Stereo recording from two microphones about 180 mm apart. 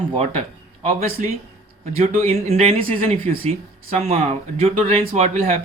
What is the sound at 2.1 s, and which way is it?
Speech, 40° right (ahead or behind).